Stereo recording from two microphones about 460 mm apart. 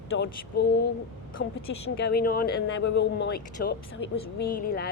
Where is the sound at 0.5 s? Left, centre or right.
Centre.